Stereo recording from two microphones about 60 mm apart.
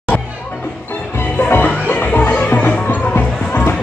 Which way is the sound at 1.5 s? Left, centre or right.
Left.